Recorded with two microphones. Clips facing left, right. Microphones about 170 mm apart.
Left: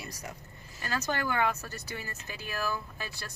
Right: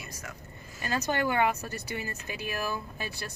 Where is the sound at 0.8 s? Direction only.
15° right (ahead or behind).